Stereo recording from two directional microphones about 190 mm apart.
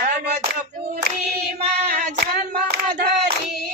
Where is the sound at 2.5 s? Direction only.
55° right (ahead or behind).